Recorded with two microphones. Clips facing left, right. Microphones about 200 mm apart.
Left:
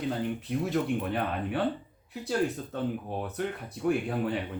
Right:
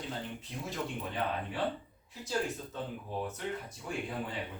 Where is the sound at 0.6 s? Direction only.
60° left (ahead or behind).